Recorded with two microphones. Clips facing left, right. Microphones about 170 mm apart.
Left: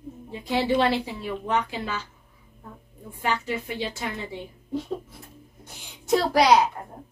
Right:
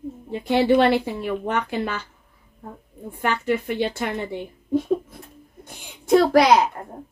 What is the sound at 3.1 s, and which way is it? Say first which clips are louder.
Speech: right 5 dB; 55° right (ahead or behind).